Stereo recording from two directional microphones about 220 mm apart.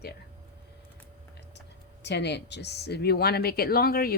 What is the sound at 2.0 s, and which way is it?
Speech, 50° left (ahead or behind).